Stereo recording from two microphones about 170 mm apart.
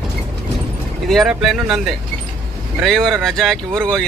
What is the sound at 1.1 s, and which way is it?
Speech, centre (ahead or behind).